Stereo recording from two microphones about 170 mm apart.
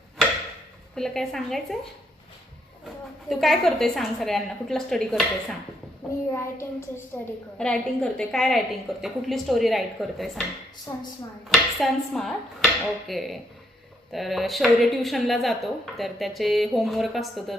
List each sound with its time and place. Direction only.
0.9 s a woman's voice: centre (ahead or behind)
3.2 s a woman's voice: centre (ahead or behind)
6.3 s child singing: 15° left (ahead or behind)
7.6 s a woman's voice: 5° left (ahead or behind)
10.9 s speech: 20° left (ahead or behind)
11.4 s a woman's voice: centre (ahead or behind)